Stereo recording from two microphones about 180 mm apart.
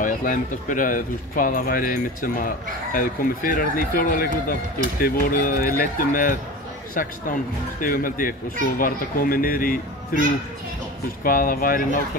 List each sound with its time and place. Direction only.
0.0 s speech: 45° left (ahead or behind)
7.8 s speech: 50° left (ahead or behind)
11.2 s speech: 50° left (ahead or behind)